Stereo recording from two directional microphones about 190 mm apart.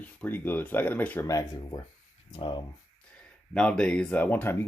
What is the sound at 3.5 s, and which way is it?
Speech, 5° left (ahead or behind).